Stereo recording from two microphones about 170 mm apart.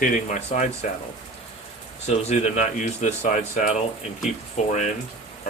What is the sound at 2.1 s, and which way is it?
Speech, 40° left (ahead or behind).